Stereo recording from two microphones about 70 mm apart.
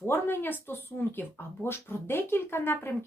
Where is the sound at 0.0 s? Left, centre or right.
Left.